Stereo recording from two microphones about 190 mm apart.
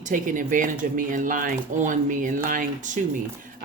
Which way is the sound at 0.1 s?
45° right (ahead or behind).